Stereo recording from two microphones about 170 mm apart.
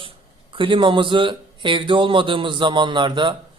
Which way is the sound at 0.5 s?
30° right (ahead or behind).